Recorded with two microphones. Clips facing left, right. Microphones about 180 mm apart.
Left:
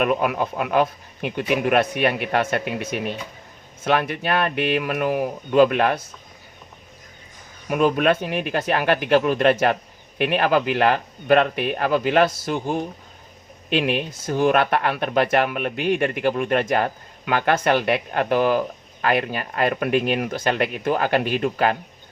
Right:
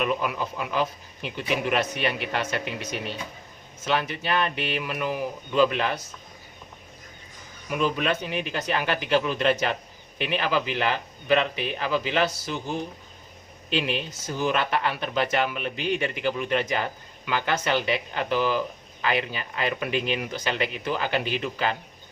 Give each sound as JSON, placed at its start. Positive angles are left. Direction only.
{"t": 0.0, "sound": "speech", "side_deg": 55}
{"t": 7.7, "sound": "speech", "side_deg": 50}